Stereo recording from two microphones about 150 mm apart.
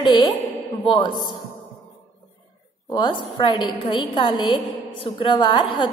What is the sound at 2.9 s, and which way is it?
A woman's voice, 30° left (ahead or behind).